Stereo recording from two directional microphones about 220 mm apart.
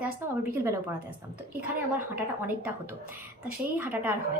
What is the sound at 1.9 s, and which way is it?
Speech, 10° right (ahead or behind).